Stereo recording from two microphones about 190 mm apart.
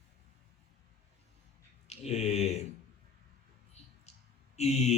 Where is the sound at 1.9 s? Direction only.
35° left (ahead or behind).